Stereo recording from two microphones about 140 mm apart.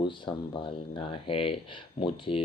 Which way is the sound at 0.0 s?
35° left (ahead or behind).